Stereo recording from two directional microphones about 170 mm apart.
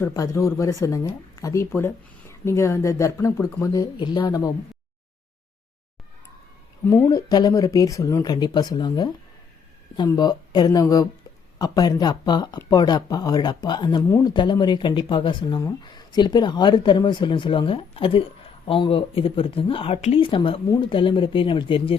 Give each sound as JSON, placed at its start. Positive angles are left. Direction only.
{"t": 0.0, "sound": "speech", "side_deg": 20}
{"t": 6.8, "sound": "speech", "side_deg": 15}
{"t": 10.1, "sound": "speech", "side_deg": 25}